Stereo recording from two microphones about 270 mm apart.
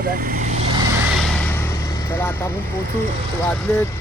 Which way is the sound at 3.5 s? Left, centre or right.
Centre.